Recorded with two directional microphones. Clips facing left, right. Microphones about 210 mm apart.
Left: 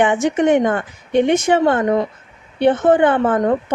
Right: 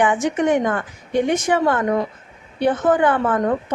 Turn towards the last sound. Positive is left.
turn(degrees=25)  # may be behind; listen again after turning